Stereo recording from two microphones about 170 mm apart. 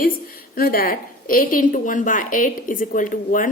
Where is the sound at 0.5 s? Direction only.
60° left (ahead or behind).